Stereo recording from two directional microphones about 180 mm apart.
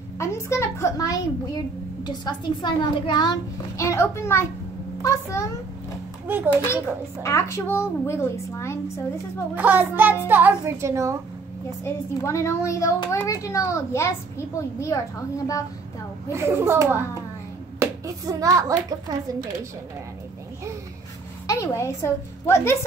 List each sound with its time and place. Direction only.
0.2 s a child's voice: 15° left (ahead or behind)
6.2 s a child's voice: 10° right (ahead or behind)
7.2 s a child's voice: 15° left (ahead or behind)
9.6 s a child's voice: 10° right (ahead or behind)
11.8 s a child's voice: 15° left (ahead or behind)
16.3 s a child's voice: 15° right (ahead or behind)
21.5 s a child's voice: 15° left (ahead or behind)